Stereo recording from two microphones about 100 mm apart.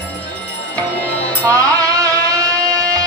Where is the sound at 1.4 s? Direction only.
35° right (ahead or behind).